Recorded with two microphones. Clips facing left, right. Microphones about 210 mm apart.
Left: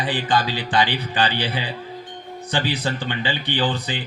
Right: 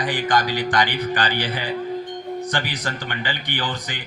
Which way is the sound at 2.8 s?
15° left (ahead or behind).